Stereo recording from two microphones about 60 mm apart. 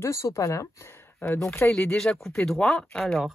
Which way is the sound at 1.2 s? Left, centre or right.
Left.